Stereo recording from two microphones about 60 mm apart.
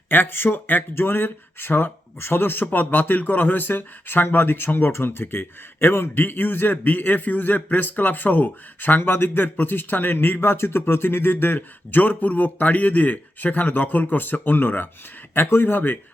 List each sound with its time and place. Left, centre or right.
0.1 s speech: left